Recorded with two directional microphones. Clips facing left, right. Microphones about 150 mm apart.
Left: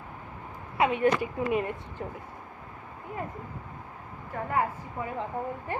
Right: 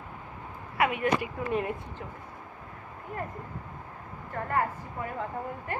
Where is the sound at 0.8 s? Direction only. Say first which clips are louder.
Left 2 dB; 30° left (ahead or behind).